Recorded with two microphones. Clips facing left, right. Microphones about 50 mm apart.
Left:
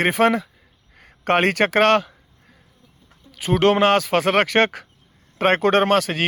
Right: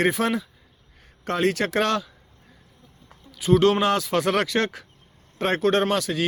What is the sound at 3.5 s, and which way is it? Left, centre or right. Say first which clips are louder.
Speech: left 4 dB; left.